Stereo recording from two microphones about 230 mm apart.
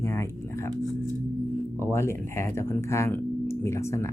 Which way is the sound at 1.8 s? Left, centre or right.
Centre.